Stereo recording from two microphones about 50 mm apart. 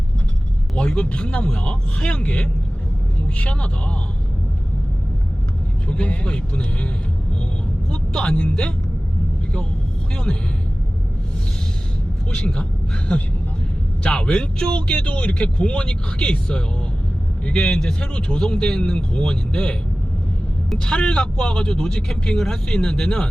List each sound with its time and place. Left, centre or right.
0.8 s speech: left
5.9 s speech: left
7.9 s speech: centre
10.3 s speech: left
12.3 s speech: centre
14.0 s speech: left
20.8 s speech: centre